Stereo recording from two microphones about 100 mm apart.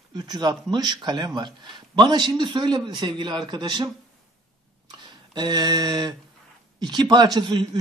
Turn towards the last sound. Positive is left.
turn(degrees=-50)  # may be behind; listen again after turning